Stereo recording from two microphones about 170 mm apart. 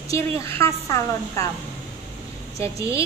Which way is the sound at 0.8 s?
20° left (ahead or behind).